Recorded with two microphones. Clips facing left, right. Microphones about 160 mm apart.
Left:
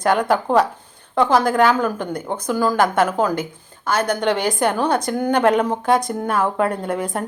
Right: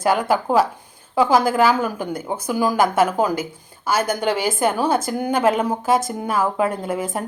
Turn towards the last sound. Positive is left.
turn(degrees=-5)  # may be behind; listen again after turning